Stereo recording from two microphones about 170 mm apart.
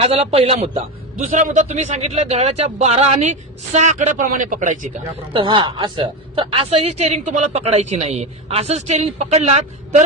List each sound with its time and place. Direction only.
0.0 s a man's voice: 35° right (ahead or behind)
5.3 s a man's voice: 30° right (ahead or behind)